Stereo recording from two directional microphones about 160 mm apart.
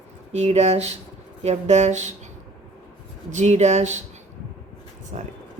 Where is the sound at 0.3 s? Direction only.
45° right (ahead or behind).